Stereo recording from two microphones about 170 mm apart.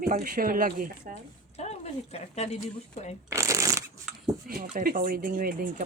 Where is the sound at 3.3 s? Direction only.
20° right (ahead or behind).